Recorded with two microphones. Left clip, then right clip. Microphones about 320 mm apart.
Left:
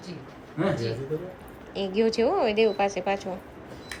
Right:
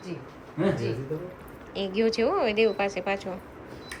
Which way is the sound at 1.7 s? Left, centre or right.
Centre.